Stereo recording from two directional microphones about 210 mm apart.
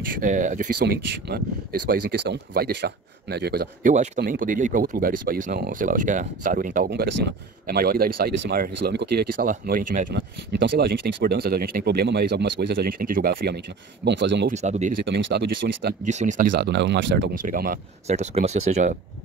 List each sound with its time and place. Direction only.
0.0 s speech: 40° right (ahead or behind)
0.7 s speech: 50° right (ahead or behind)
10.1 s speech: 60° right (ahead or behind)
14.0 s speech: 60° right (ahead or behind)
14.5 s speech: 35° right (ahead or behind)
15.0 s speech: 60° right (ahead or behind)
16.0 s speech: 35° right (ahead or behind); by 17.4 s 55° right (ahead or behind)
17.4 s speech: 40° right (ahead or behind)